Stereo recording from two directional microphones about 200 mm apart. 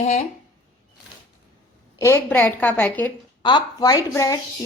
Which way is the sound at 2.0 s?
15° left (ahead or behind).